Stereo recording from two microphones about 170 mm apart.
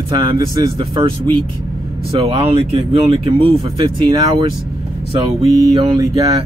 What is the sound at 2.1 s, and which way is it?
Speech, 35° right (ahead or behind).